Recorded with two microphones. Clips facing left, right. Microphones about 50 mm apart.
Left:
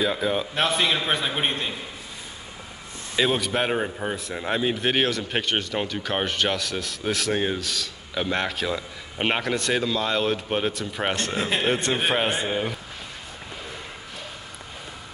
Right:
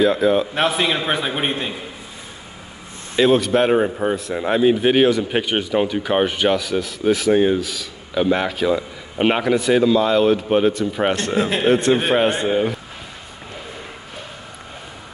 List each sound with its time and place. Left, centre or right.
0.0 s a man's voice: centre
3.2 s a man's voice: centre